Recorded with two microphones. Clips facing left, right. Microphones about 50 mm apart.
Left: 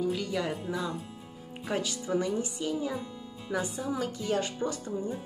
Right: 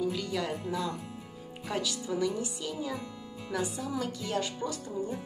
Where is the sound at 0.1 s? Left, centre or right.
Centre.